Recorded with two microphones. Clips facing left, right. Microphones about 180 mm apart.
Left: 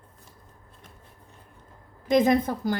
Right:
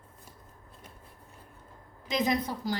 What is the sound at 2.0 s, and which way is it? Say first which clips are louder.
Speech: left 8 dB; 50° left (ahead or behind).